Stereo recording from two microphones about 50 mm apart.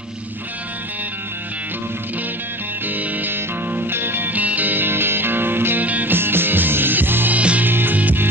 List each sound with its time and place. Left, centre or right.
2.9 s music: right
5.9 s music: right
6.1 s music: right
7.3 s music: right
7.6 s music: right